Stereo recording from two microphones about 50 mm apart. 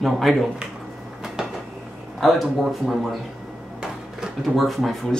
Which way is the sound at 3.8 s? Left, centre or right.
Centre.